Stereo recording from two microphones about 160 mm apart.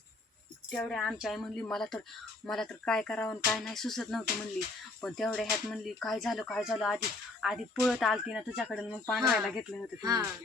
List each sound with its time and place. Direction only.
0.7 s speech: centre (ahead or behind)
10.0 s speech: 25° right (ahead or behind)